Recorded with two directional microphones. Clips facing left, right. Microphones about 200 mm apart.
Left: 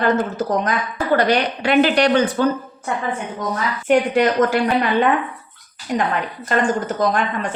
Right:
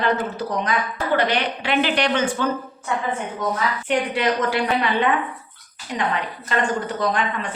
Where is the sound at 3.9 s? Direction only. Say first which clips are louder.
Left 7 dB; 45° left (ahead or behind).